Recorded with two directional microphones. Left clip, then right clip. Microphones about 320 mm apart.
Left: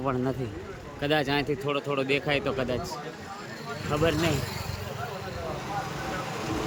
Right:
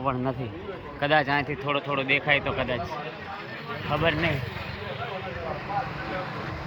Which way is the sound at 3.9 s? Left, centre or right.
Centre.